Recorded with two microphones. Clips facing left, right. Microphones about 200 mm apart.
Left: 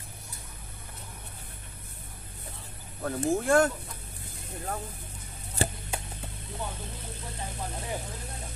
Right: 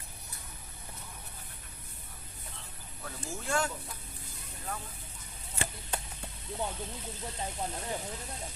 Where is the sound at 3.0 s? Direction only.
55° left (ahead or behind).